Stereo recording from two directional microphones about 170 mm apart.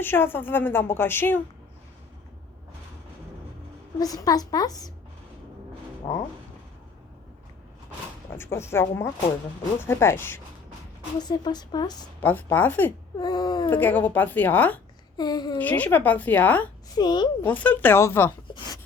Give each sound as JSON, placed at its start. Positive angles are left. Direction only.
{"t": 0.0, "sound": "a woman's voice", "side_deg": 10}
{"t": 4.0, "sound": "speech", "side_deg": 20}
{"t": 8.4, "sound": "a woman's voice", "side_deg": 15}
{"t": 11.2, "sound": "speech", "side_deg": 25}
{"t": 12.2, "sound": "a woman's voice", "side_deg": 10}
{"t": 13.1, "sound": "speech", "side_deg": 25}
{"t": 13.7, "sound": "a woman's voice", "side_deg": 10}
{"t": 15.2, "sound": "speech", "side_deg": 25}
{"t": 15.5, "sound": "a woman's voice", "side_deg": 10}
{"t": 16.9, "sound": "speech", "side_deg": 25}
{"t": 17.4, "sound": "a woman's voice", "side_deg": 10}